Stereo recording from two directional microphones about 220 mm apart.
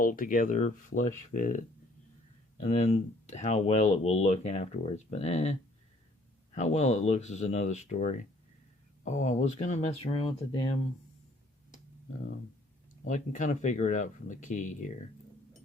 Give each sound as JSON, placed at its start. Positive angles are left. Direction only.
{"t": 0.0, "sound": "speech", "side_deg": 40}
{"t": 2.6, "sound": "speech", "side_deg": 35}
{"t": 13.1, "sound": "speech", "side_deg": 35}